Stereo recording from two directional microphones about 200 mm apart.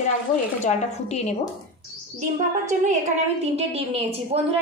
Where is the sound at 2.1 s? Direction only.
35° right (ahead or behind).